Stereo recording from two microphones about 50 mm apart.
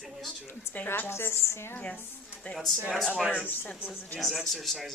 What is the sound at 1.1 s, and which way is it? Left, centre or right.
Speech, left.